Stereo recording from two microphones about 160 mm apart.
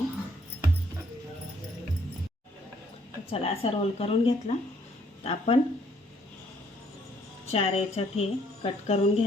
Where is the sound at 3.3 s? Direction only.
35° left (ahead or behind).